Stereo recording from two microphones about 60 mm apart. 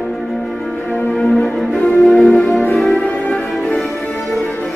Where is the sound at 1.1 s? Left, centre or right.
Centre.